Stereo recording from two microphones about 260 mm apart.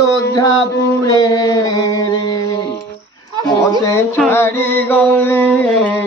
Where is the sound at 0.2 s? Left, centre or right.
Centre.